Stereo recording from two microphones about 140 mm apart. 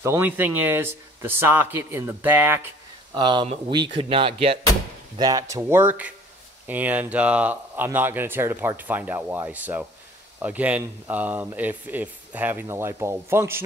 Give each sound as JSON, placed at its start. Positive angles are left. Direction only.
{"t": 0.0, "sound": "speech", "side_deg": -15}
{"t": 3.2, "sound": "speech", "side_deg": -35}
{"t": 5.2, "sound": "speech", "side_deg": -25}